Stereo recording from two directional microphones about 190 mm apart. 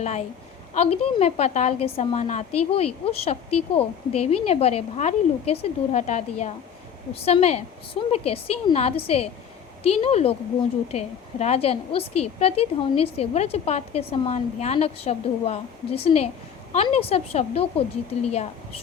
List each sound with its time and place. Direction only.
0.0 s a woman's voice: 35° left (ahead or behind)